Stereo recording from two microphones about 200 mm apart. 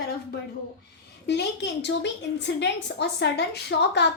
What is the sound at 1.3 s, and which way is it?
A woman's voice, 60° left (ahead or behind).